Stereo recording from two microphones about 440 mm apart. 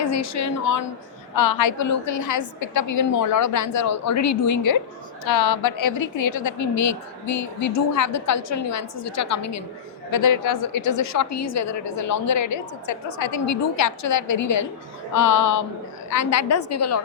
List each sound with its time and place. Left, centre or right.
0.0 s a woman's voice: left